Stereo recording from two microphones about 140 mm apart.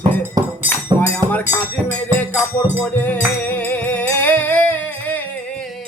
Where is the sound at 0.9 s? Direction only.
15° left (ahead or behind).